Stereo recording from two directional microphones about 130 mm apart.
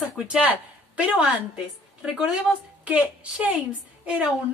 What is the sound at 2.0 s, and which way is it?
A woman's voice, 5° right (ahead or behind).